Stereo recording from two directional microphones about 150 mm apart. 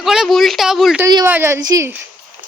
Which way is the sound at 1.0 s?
20° right (ahead or behind).